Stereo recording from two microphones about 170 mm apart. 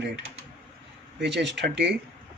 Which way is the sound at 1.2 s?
90° right.